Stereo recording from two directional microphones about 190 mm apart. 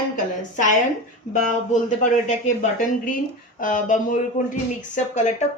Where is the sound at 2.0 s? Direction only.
40° left (ahead or behind).